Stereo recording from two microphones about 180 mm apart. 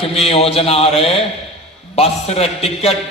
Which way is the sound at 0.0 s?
35° left (ahead or behind).